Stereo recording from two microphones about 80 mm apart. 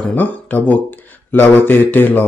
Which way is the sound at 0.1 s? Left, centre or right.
Centre.